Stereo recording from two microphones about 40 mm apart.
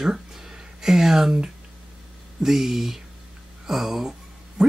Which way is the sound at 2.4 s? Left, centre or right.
Centre.